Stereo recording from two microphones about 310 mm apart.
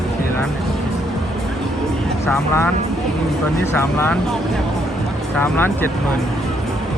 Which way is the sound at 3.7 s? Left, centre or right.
Centre.